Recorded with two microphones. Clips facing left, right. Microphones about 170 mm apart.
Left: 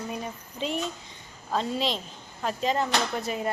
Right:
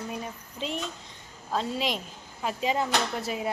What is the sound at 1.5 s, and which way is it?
A woman's voice, 10° right (ahead or behind).